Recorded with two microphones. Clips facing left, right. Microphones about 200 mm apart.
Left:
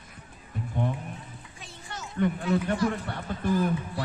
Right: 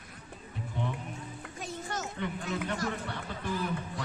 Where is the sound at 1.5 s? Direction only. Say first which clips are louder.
Right 6 dB; 45° right (ahead or behind).